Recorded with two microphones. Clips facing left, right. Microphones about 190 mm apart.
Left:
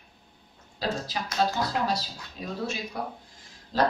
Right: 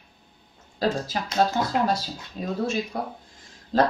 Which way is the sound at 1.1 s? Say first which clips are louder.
Right 3 dB; 50° right (ahead or behind).